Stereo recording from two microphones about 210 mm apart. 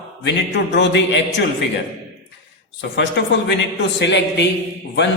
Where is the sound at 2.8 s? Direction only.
50° left (ahead or behind).